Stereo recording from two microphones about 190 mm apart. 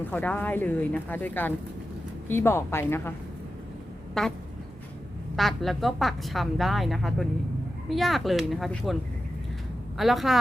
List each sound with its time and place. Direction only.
0.0 s speech: 5° left (ahead or behind)
4.2 s a woman's voice: centre (ahead or behind)
5.4 s a woman's voice: centre (ahead or behind)
10.0 s a woman's voice: centre (ahead or behind)